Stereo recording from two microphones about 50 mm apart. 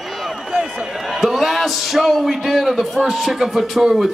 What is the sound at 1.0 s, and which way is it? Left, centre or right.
A man's voice, centre.